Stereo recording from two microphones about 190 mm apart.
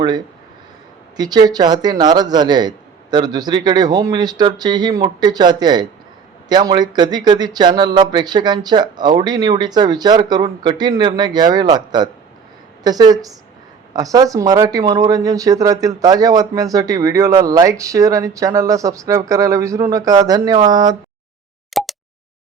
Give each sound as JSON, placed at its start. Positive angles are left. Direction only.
{"t": 1.1, "sound": "speech", "side_deg": -20}
{"t": 21.7, "sound": "plop", "side_deg": 0}